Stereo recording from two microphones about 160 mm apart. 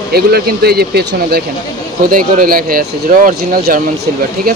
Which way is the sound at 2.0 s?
65° right (ahead or behind).